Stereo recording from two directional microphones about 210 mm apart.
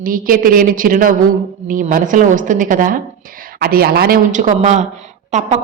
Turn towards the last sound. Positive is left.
turn(degrees=-30)  # may be behind; listen again after turning